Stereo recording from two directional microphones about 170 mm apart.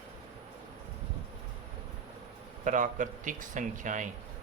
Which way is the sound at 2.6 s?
50° right (ahead or behind).